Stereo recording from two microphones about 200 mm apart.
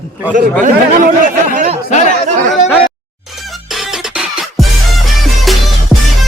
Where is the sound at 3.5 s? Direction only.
Centre (ahead or behind).